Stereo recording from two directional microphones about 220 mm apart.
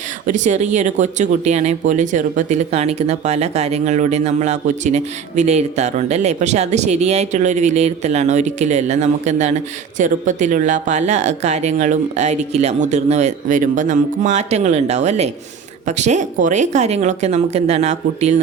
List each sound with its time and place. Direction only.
0.3 s speech: 35° right (ahead or behind)